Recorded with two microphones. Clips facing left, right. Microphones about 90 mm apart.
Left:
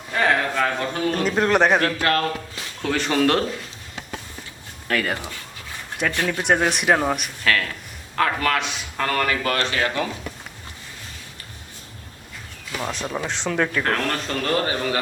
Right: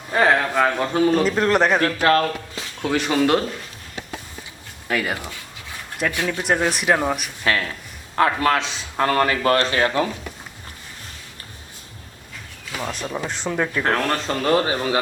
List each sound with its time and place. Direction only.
0.1 s a sound: 25° right (ahead or behind)
1.2 s speech: centre (ahead or behind)
2.0 s speech: 30° right (ahead or behind)
2.8 s speech: 10° right (ahead or behind)
4.9 s speech: 5° right (ahead or behind)
6.4 s speech: centre (ahead or behind)
7.4 s a man's voice: 25° right (ahead or behind)
12.8 s speech: centre (ahead or behind)
13.8 s speech: 20° right (ahead or behind)